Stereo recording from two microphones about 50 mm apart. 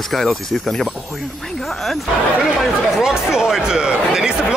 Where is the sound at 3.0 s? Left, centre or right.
Centre.